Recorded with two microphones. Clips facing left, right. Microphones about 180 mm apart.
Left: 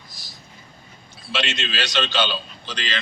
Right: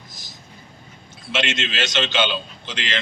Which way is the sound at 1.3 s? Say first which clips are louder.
Right 2 dB; 20° right (ahead or behind).